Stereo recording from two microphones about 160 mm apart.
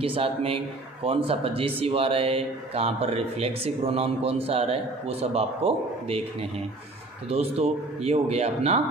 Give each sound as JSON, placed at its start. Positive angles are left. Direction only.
{"t": 0.0, "sound": "speech", "side_deg": -35}
{"t": 7.2, "sound": "speech", "side_deg": -40}